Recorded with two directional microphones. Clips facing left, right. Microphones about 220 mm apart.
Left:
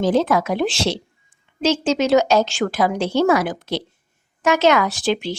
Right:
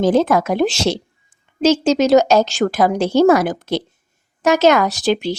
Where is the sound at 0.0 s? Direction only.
45° right (ahead or behind).